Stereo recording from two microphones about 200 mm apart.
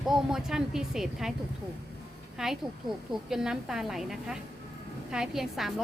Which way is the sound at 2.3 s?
Centre (ahead or behind).